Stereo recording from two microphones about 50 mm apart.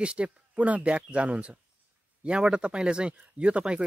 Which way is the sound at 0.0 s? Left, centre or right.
Right.